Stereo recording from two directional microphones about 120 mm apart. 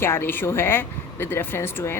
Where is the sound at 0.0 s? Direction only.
20° left (ahead or behind).